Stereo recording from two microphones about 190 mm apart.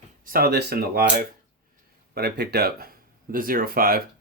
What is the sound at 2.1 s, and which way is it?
Speech, 60° right (ahead or behind).